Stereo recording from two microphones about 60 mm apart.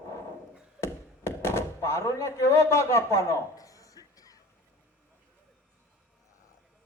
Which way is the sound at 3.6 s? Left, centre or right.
Left.